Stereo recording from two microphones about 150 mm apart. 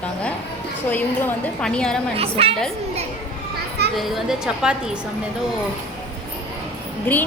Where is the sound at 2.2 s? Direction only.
40° right (ahead or behind).